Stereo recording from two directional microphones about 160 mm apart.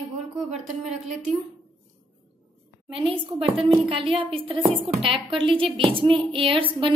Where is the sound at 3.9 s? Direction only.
35° right (ahead or behind).